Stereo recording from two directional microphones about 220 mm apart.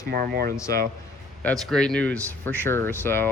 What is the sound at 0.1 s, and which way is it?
Speech, 45° right (ahead or behind).